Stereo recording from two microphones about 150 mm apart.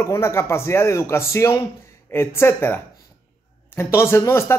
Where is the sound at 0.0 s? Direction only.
20° left (ahead or behind).